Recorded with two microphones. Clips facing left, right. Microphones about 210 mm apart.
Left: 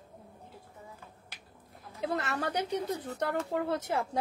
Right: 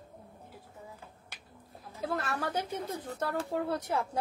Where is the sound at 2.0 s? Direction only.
20° left (ahead or behind).